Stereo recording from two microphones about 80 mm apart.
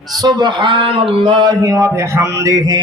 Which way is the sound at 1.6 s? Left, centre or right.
Right.